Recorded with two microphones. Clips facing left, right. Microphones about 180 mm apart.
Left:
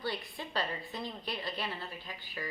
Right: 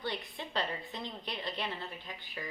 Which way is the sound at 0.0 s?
20° right (ahead or behind).